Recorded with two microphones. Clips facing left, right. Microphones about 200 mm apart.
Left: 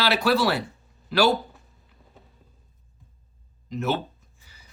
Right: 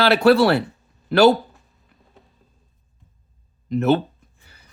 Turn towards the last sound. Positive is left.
turn(degrees=-60)  # may be behind; listen again after turning